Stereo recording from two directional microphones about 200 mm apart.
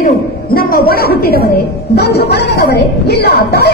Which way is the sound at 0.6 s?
50° left (ahead or behind).